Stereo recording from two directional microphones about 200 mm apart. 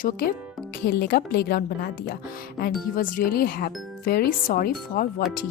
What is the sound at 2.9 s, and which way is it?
Speech, 45° left (ahead or behind).